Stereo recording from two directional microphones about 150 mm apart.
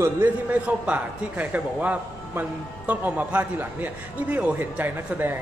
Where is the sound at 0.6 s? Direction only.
10° right (ahead or behind).